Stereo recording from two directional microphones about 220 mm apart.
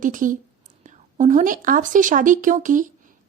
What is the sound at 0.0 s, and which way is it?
A woman's voice, 35° right (ahead or behind).